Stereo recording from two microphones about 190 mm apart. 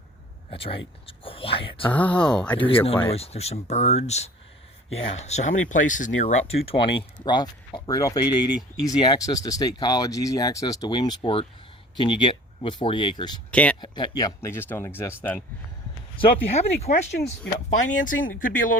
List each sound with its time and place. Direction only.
0.5 s speech: 30° left (ahead or behind)
1.9 s speech: 5° left (ahead or behind)
2.6 s speech: 30° left (ahead or behind)
6.2 s speech: 30° left (ahead or behind)
13.5 s speech: 5° left (ahead or behind)
13.8 s speech: 25° left (ahead or behind)
16.5 s speech: 35° left (ahead or behind)